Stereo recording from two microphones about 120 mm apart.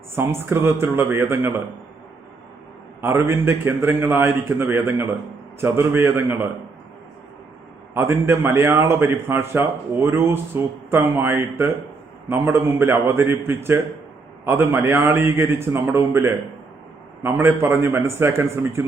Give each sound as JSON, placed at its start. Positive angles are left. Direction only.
{"t": 0.1, "sound": "a man's voice", "side_deg": -20}
{"t": 3.0, "sound": "a man's voice", "side_deg": -20}
{"t": 7.9, "sound": "a man's voice", "side_deg": -20}